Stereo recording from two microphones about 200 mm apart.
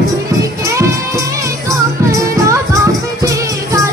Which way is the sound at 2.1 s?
15° right (ahead or behind).